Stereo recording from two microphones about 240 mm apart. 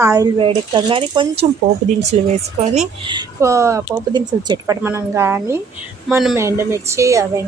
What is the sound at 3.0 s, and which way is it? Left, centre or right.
Speech, centre.